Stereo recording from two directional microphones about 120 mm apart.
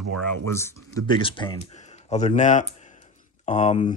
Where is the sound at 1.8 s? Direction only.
70° left (ahead or behind).